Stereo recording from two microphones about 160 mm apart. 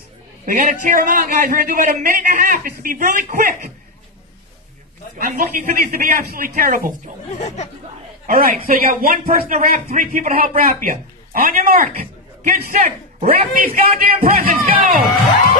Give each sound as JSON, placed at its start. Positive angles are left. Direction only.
{"t": 0.5, "sound": "a man's voice", "side_deg": -55}
{"t": 5.7, "sound": "a man's voice", "side_deg": -65}
{"t": 7.3, "sound": "speech", "side_deg": 45}
{"t": 8.3, "sound": "a man's voice", "side_deg": -65}